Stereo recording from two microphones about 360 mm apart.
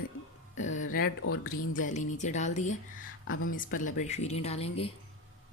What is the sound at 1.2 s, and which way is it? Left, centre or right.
Speech, left.